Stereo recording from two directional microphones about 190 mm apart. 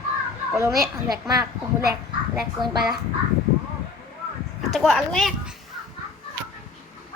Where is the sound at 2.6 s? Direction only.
25° right (ahead or behind).